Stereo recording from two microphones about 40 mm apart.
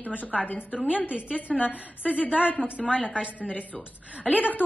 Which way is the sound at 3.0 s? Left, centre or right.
Right.